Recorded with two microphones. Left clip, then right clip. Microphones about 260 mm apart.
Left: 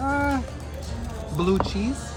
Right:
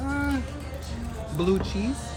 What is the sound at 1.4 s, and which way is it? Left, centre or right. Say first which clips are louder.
Speech: left 2 dB; centre.